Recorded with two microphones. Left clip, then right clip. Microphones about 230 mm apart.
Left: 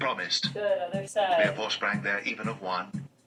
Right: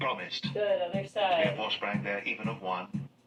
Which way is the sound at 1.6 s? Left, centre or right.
Left.